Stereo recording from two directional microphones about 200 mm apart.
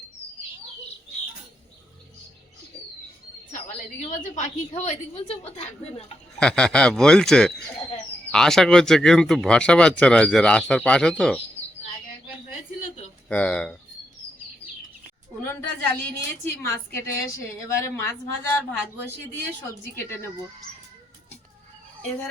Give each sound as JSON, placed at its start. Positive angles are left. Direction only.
{"t": 4.1, "sound": "a woman's voice", "side_deg": 40}
{"t": 6.4, "sound": "speech", "side_deg": 5}
{"t": 13.2, "sound": "speech", "side_deg": 5}
{"t": 15.4, "sound": "a woman's voice", "side_deg": 10}